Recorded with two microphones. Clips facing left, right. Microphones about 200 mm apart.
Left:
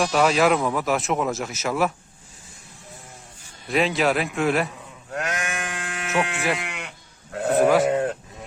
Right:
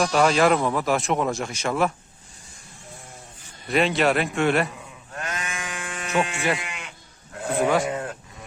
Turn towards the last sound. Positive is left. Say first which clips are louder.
# left 4 dB
turn(degrees=0)  # may be behind; listen again after turning